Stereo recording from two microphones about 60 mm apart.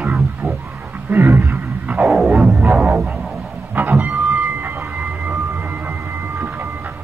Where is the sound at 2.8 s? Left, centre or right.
Right.